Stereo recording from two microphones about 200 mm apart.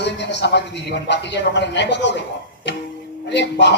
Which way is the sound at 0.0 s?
60° left (ahead or behind).